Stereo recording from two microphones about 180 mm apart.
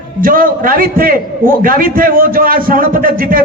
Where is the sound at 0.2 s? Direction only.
50° right (ahead or behind).